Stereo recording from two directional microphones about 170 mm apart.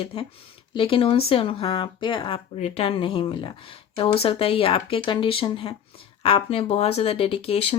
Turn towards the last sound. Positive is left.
turn(degrees=35)  # may be behind; listen again after turning